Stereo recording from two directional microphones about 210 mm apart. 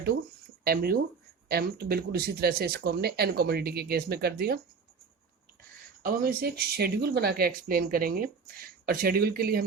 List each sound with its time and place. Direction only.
0.6 s speech: 45° right (ahead or behind)
6.1 s speech: 45° right (ahead or behind)